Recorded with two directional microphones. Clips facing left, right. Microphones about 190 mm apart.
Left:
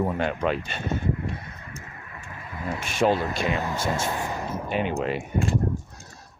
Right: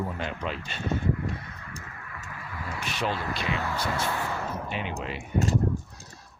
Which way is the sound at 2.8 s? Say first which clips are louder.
Left 9 dB; 45° left (ahead or behind).